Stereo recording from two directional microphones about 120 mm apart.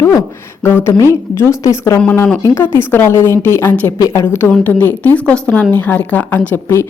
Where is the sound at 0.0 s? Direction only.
25° left (ahead or behind).